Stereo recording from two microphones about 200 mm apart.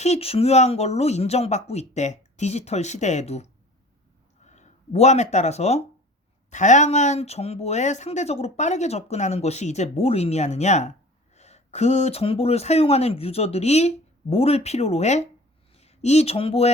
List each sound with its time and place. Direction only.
0.0 s speech: 30° left (ahead or behind)